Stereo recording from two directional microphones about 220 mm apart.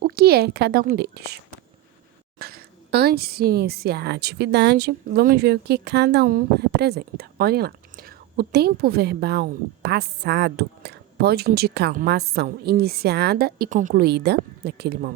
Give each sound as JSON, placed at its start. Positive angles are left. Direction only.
{"t": 0.0, "sound": "a woman's voice", "side_deg": -40}
{"t": 2.4, "sound": "a woman's voice", "side_deg": -45}